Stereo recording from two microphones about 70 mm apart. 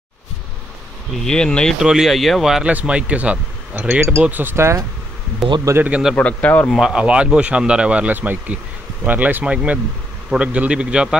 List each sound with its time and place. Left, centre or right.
1.1 s speech: centre
1.8 s speech: centre
2.6 s speech: centre
3.7 s speech: right
4.6 s speech: right
5.4 s speech: centre
6.1 s speech: left
6.8 s speech: centre